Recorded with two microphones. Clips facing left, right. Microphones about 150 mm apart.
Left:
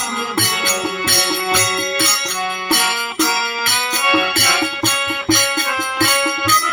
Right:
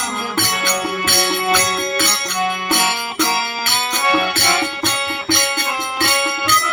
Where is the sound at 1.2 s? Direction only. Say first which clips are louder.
Right 2 dB; 30° right (ahead or behind).